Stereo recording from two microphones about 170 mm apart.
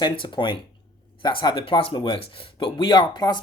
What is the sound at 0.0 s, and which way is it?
Speech, 30° left (ahead or behind).